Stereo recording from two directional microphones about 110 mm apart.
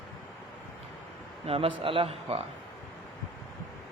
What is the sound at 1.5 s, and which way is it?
Speech, 55° right (ahead or behind).